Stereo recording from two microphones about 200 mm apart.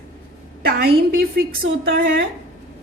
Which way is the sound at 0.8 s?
50° right (ahead or behind).